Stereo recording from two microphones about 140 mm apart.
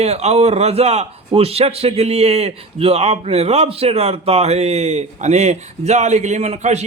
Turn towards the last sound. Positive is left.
turn(degrees=-50)  # may be behind; listen again after turning